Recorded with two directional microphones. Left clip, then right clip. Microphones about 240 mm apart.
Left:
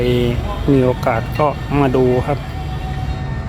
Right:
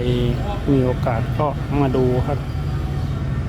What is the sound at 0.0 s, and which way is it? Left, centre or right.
Speech, left.